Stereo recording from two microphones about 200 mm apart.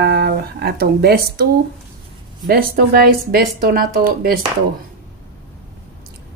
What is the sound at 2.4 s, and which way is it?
Speech, 50° right (ahead or behind).